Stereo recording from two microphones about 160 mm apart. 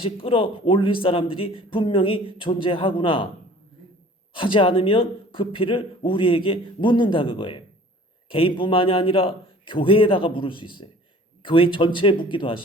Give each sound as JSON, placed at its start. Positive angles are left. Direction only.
{"t": 0.0, "sound": "a man's voice", "side_deg": 35}
{"t": 4.4, "sound": "a man's voice", "side_deg": 30}